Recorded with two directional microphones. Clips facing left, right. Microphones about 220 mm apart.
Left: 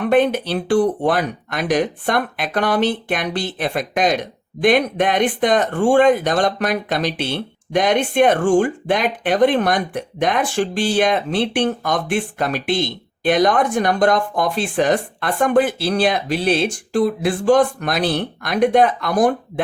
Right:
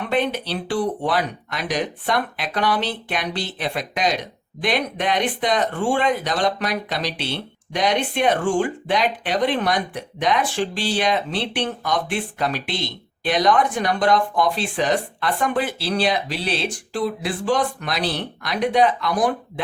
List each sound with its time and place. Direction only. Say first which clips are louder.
0.1 s speech: left 6 dB; 50° left (ahead or behind)